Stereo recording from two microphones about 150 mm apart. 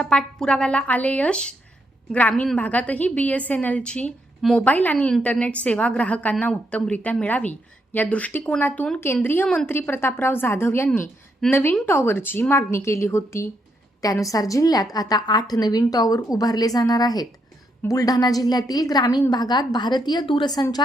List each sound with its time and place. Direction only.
0.0 s a woman's voice: 5° left (ahead or behind); by 20.8 s 25° left (ahead or behind)